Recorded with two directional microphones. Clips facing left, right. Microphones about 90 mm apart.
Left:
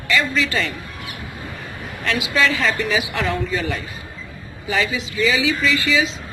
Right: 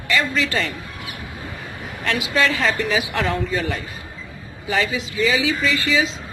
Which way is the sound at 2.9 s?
40° right (ahead or behind).